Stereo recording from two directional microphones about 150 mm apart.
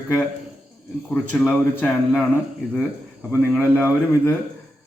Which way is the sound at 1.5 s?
10° left (ahead or behind).